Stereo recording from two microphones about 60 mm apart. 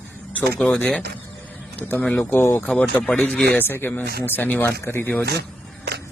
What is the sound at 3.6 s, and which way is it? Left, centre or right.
Speech, left.